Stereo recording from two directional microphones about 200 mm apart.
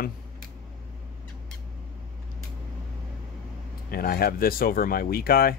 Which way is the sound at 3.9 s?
50° left (ahead or behind).